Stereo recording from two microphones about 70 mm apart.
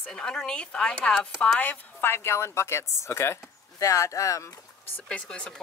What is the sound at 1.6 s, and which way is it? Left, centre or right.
Speech, left.